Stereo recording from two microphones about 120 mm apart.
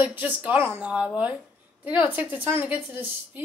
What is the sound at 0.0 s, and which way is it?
A woman's voice, 15° right (ahead or behind).